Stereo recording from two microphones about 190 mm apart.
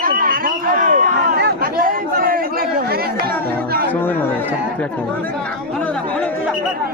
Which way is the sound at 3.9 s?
10° left (ahead or behind).